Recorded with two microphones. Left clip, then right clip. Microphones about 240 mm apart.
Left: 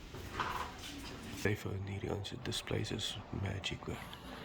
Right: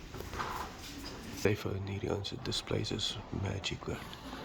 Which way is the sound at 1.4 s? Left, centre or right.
Centre.